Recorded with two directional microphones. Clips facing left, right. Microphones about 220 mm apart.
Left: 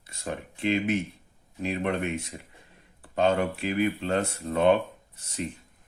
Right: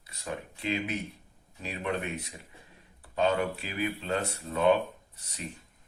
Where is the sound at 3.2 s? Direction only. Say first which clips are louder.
Left 4 dB; 50° left (ahead or behind).